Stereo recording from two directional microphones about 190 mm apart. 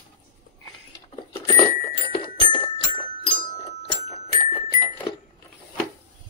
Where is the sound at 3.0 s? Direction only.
30° left (ahead or behind).